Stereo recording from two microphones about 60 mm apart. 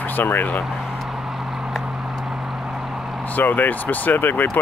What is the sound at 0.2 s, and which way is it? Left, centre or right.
Speech, left.